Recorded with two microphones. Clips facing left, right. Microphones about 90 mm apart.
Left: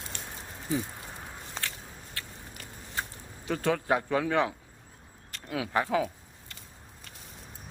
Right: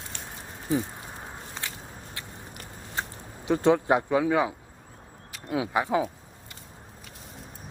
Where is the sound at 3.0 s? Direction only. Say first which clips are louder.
Right 2 dB; 25° right (ahead or behind).